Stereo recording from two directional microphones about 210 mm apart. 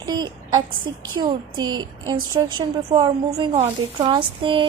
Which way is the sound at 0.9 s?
20° right (ahead or behind).